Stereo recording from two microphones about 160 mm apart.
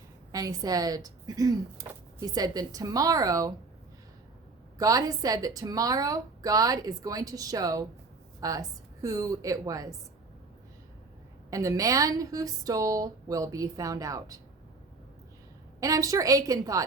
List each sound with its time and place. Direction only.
0.3 s speech: 20° right (ahead or behind)
4.8 s speech: 20° right (ahead or behind)
11.5 s speech: 20° right (ahead or behind)
15.8 s speech: 20° right (ahead or behind)